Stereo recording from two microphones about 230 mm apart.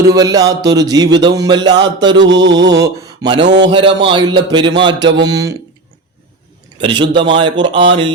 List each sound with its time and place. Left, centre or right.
0.1 s a man's voice: centre
2.2 s mantra: right
2.5 s mantra: centre
3.4 s mantra: right
3.7 s a man's voice: right
6.7 s a man's voice: right